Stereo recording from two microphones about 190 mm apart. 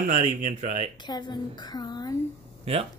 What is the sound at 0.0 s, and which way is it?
Speech, 40° right (ahead or behind).